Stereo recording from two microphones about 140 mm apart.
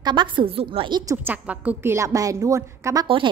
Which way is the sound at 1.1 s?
15° right (ahead or behind).